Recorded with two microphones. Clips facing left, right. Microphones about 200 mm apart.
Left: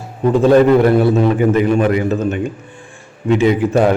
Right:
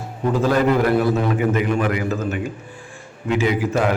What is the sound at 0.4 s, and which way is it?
A man's voice, 30° left (ahead or behind).